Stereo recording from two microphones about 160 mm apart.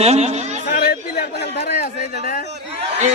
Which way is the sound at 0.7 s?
75° left (ahead or behind).